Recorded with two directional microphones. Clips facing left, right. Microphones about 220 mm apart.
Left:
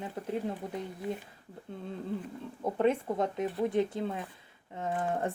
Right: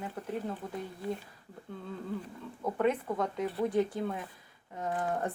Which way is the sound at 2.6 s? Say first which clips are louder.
Left 2 dB; 25° left (ahead or behind).